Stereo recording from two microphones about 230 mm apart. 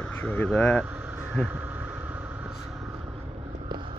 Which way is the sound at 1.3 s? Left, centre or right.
Centre.